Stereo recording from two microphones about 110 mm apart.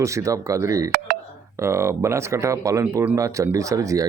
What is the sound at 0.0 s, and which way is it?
Speech, 30° right (ahead or behind).